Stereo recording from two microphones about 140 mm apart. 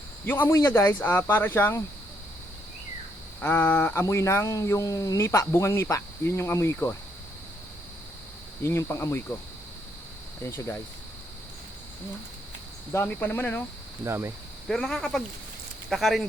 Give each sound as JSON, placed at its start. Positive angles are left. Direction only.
{"t": 0.3, "sound": "speech", "side_deg": 15}
{"t": 3.4, "sound": "speech", "side_deg": 15}
{"t": 8.6, "sound": "speech", "side_deg": 20}
{"t": 10.4, "sound": "speech", "side_deg": 20}
{"t": 12.9, "sound": "speech", "side_deg": 15}
{"t": 14.0, "sound": "speech", "side_deg": -20}
{"t": 14.7, "sound": "speech", "side_deg": 5}